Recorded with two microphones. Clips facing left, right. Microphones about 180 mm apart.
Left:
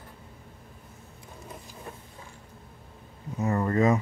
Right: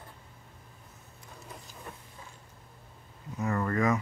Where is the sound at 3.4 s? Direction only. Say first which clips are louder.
Left 4 dB; 25° left (ahead or behind).